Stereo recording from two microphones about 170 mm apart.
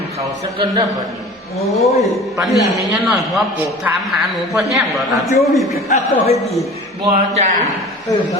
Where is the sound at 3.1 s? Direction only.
5° right (ahead or behind).